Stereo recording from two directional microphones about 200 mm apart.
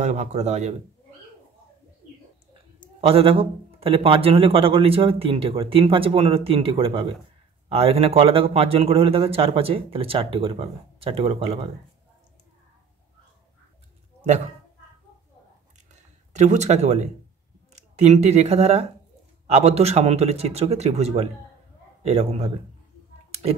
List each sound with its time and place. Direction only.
0.0 s speech: 35° right (ahead or behind)
3.0 s a man's voice: 30° right (ahead or behind)
16.3 s speech: 35° right (ahead or behind)